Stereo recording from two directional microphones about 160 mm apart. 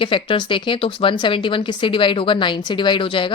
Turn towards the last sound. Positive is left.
turn(degrees=30)  # may be behind; listen again after turning